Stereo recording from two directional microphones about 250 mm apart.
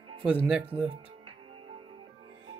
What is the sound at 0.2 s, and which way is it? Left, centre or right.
Speech, centre.